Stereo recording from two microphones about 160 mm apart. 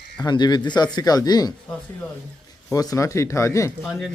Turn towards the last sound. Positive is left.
turn(degrees=0)  # may be behind; listen again after turning